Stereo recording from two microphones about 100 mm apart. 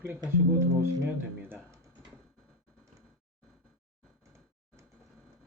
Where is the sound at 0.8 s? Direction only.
25° right (ahead or behind).